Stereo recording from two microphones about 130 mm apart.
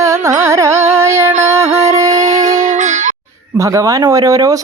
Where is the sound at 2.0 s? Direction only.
60° right (ahead or behind).